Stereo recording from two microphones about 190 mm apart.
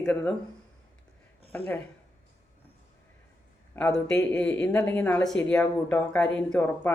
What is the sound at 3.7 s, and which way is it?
Speech, 5° left (ahead or behind).